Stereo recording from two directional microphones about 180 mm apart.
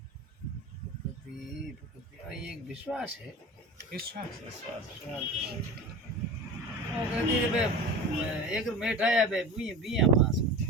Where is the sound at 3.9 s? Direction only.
55° right (ahead or behind).